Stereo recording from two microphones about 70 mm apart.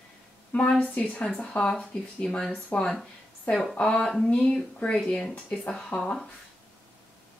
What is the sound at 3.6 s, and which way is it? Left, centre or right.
Speech, centre.